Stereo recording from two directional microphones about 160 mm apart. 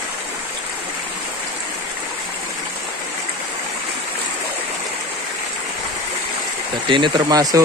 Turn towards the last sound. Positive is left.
turn(degrees=-25)  # may be behind; listen again after turning